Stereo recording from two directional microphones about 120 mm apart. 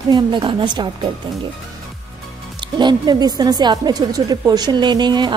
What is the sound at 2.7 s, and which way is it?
A woman's voice, 35° right (ahead or behind).